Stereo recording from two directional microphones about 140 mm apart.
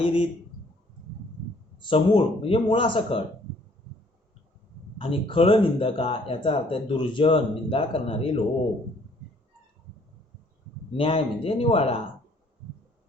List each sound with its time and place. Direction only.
0.0 s speech: 40° left (ahead or behind)
1.8 s speech: 35° left (ahead or behind)
4.9 s speech: 40° left (ahead or behind)
10.9 s speech: 40° left (ahead or behind)